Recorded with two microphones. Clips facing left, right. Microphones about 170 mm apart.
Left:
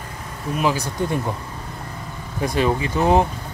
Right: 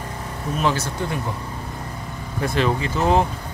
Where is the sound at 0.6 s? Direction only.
10° left (ahead or behind).